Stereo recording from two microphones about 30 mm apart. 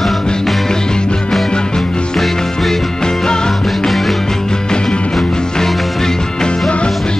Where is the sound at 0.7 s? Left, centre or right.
Left.